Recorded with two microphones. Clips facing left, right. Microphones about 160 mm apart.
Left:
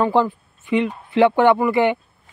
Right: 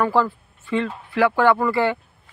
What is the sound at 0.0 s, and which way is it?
Speech, 20° left (ahead or behind).